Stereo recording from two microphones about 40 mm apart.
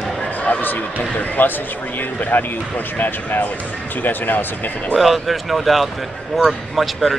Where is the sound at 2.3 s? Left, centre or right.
Left.